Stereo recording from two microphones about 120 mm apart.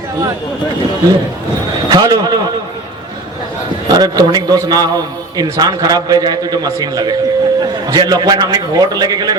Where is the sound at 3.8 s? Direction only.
35° right (ahead or behind).